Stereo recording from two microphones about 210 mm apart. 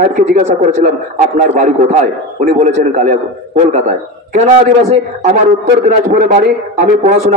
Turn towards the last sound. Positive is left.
turn(degrees=-35)  # may be behind; listen again after turning